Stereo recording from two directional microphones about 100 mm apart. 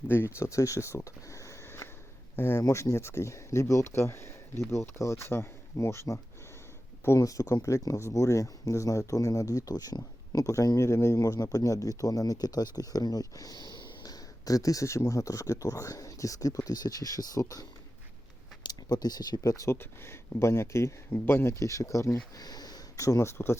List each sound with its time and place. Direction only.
0.1 s speech: 25° left (ahead or behind)